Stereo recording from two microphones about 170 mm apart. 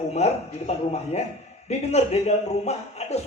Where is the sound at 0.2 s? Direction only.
40° left (ahead or behind).